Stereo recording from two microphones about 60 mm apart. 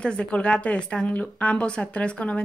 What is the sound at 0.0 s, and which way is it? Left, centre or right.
Speech, centre.